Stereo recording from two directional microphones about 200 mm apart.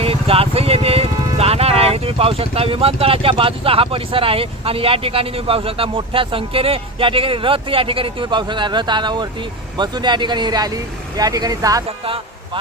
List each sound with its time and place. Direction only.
0.0 s speech: 30° right (ahead or behind)